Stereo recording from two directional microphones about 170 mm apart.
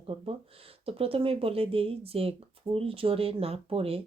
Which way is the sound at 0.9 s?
35° right (ahead or behind).